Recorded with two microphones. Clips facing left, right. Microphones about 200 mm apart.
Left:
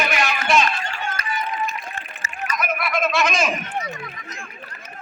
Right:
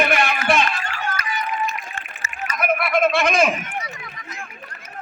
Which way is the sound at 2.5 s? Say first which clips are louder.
Right 4 dB; 55° right (ahead or behind).